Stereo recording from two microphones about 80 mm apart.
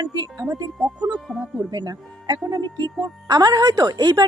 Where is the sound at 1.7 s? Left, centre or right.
Right.